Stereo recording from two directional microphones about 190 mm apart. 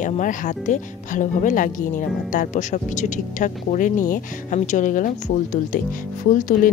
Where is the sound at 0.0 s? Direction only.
45° left (ahead or behind).